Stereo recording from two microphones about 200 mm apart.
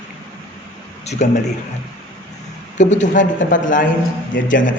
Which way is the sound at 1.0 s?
35° left (ahead or behind).